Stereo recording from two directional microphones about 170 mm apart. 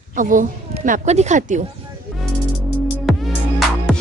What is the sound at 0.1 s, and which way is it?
A woman's voice, 50° right (ahead or behind).